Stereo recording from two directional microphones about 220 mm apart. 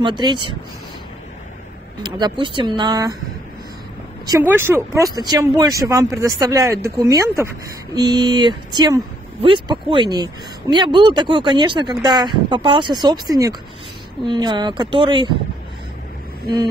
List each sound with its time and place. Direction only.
0.0 s speech: 20° right (ahead or behind)
2.0 s speech: 20° right (ahead or behind)
4.3 s speech: 10° right (ahead or behind)